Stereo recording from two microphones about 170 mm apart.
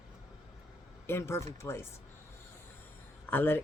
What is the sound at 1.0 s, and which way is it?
Speech, 15° left (ahead or behind).